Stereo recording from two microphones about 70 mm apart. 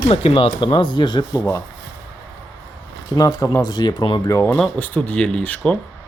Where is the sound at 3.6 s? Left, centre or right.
Left.